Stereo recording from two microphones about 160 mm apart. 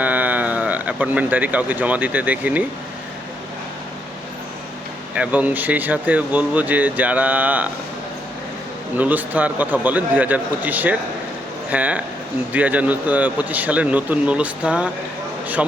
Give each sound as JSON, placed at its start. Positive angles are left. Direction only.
{"t": 0.0, "sound": "speech", "side_deg": -10}
{"t": 5.1, "sound": "speech", "side_deg": -10}
{"t": 9.0, "sound": "speech", "side_deg": -10}